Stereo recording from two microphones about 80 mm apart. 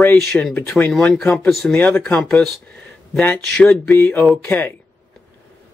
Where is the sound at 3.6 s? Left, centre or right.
Centre.